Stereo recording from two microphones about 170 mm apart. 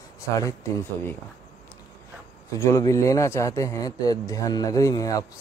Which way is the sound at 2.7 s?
20° left (ahead or behind).